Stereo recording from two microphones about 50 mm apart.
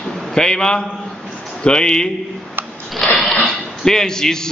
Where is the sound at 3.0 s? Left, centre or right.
Centre.